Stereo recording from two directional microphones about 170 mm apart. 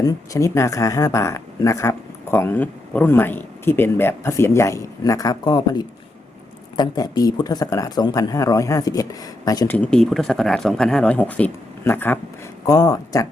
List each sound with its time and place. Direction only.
0.0 s speech: 15° left (ahead or behind)
9.7 s speech: 5° left (ahead or behind); by 13.2 s 20° left (ahead or behind)